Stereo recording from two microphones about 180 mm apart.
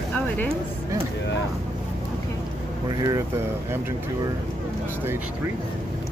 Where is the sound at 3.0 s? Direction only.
20° right (ahead or behind).